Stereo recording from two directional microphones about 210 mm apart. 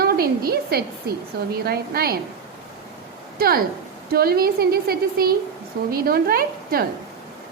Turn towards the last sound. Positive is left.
turn(degrees=-45)  # may be behind; listen again after turning